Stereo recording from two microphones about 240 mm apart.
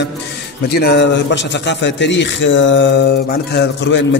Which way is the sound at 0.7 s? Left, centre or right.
Left.